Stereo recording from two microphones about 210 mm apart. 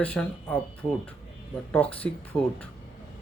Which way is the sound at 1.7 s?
5° left (ahead or behind).